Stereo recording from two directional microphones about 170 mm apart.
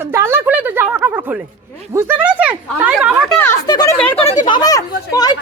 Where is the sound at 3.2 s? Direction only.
10° left (ahead or behind).